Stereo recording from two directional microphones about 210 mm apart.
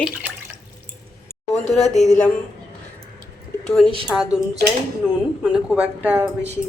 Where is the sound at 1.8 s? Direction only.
35° left (ahead or behind).